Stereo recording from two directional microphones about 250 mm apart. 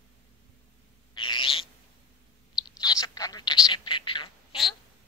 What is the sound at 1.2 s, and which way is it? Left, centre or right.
Owl, centre.